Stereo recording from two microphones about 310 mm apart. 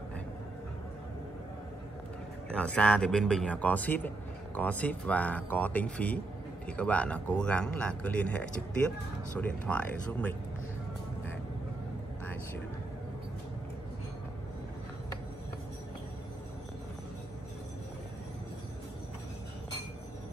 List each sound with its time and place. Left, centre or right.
2.5 s a man's voice: centre